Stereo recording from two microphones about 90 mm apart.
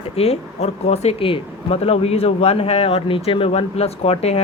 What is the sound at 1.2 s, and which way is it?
Speech, 90° left.